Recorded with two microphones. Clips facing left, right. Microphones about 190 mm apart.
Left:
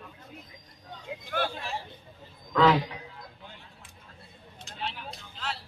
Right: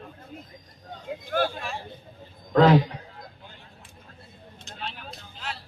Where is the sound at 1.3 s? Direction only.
45° right (ahead or behind).